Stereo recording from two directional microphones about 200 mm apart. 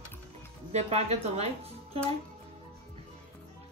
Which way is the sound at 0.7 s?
30° right (ahead or behind).